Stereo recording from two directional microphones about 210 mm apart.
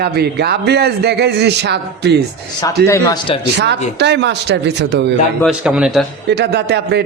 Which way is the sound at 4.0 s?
55° right (ahead or behind).